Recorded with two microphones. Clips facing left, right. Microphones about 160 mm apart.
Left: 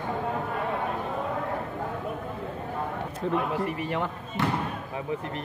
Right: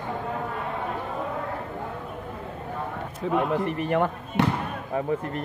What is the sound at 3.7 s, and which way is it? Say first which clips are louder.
Speech: right 5 dB; 50° right (ahead or behind).